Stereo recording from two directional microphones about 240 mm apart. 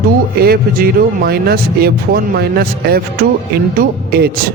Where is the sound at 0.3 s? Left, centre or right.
Right.